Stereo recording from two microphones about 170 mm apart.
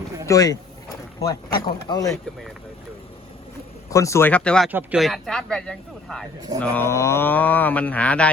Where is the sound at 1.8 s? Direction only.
20° left (ahead or behind).